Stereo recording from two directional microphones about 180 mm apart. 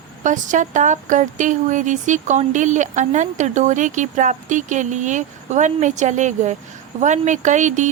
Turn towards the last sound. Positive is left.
turn(degrees=-40)  # may be behind; listen again after turning